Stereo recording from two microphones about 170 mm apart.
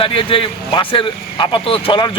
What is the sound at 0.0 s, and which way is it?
A man's voice, 30° left (ahead or behind).